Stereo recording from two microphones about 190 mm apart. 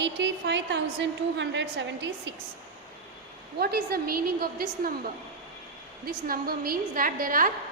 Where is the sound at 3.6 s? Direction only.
55° right (ahead or behind).